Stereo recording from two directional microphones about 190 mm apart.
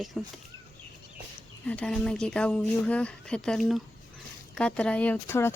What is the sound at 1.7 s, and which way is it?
Speech, 5° left (ahead or behind).